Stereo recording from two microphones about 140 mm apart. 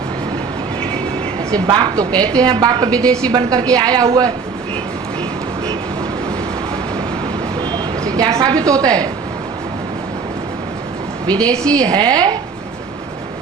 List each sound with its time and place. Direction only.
1.5 s a woman's voice: 35° right (ahead or behind)
2.9 s a woman's voice: 5° left (ahead or behind)
3.3 s a woman's voice: 30° right (ahead or behind)
7.7 s speech: 25° right (ahead or behind)
11.3 s a woman's voice: 10° left (ahead or behind)
11.9 s a woman's voice: 30° right (ahead or behind)